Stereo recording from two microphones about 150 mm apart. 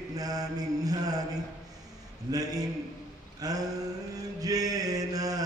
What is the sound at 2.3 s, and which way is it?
A man's voice, 25° right (ahead or behind).